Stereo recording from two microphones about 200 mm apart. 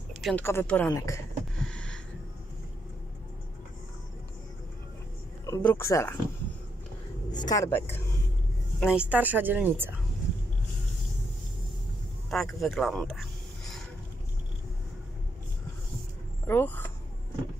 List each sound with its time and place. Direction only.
0.1 s a sound: centre (ahead or behind)
0.4 s a woman's voice: 10° left (ahead or behind)
1.6 s a sound: 5° left (ahead or behind)
5.4 s a woman's voice: 15° left (ahead or behind)
7.2 s speech: 20° left (ahead or behind)
8.7 s speech: 5° right (ahead or behind)
12.3 s speech: centre (ahead or behind)
16.4 s speech: 10° left (ahead or behind)